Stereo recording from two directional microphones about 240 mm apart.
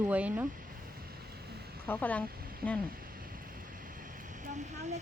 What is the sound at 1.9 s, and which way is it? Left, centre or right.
Speech, centre.